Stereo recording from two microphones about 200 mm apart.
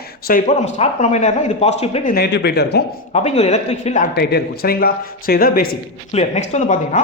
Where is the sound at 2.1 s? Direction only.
55° left (ahead or behind).